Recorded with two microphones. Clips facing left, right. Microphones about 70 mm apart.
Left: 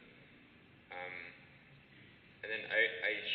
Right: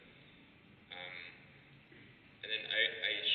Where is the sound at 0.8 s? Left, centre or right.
Left.